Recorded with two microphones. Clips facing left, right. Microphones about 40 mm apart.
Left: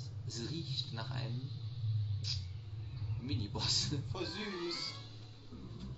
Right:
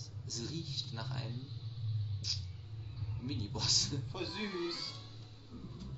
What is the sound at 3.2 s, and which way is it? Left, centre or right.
Speech, centre.